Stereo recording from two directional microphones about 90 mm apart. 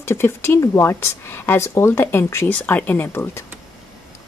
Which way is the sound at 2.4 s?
20° left (ahead or behind).